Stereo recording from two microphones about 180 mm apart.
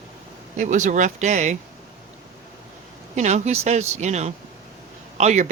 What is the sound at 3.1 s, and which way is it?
Speech, 40° right (ahead or behind).